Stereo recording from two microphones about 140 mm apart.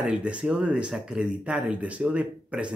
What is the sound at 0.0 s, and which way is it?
Speech, 10° right (ahead or behind).